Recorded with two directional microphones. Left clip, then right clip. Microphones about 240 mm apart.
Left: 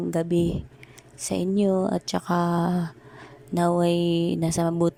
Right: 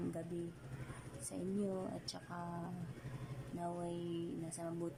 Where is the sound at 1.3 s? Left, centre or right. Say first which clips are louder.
Left 19 dB; left.